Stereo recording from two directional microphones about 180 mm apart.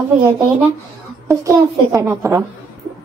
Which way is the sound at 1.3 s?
15° right (ahead or behind).